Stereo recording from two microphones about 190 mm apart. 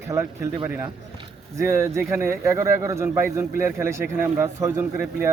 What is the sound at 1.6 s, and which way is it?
Speech, 15° right (ahead or behind).